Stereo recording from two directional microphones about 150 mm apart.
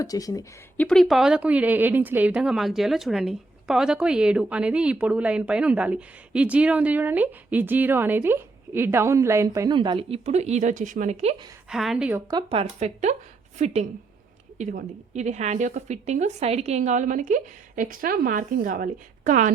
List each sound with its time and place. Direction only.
0.0 s speech: 25° left (ahead or behind)
0.8 s speech: 5° left (ahead or behind); by 11.3 s 45° right (ahead or behind)
11.7 s a woman's voice: centre (ahead or behind)
12.3 s a woman's voice: 35° right (ahead or behind); by 19.5 s 60° right (ahead or behind)